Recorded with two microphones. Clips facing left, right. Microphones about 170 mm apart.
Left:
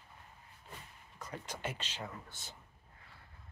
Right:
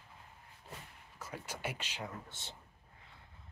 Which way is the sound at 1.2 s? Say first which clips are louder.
Even; 10° right (ahead or behind).